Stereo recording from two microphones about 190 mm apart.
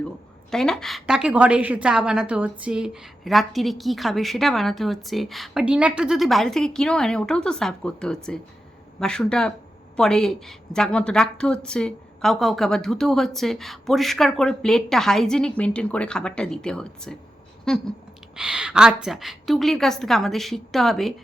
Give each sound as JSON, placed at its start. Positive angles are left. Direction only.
{"t": 0.5, "sound": "a woman's voice", "side_deg": 5}